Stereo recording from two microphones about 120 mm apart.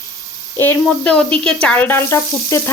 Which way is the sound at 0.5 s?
20° left (ahead or behind).